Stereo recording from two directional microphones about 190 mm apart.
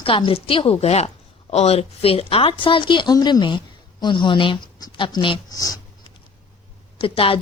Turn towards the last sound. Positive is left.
turn(degrees=30)  # may be behind; listen again after turning